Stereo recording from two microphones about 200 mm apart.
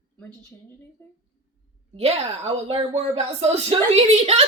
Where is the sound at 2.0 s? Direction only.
30° right (ahead or behind).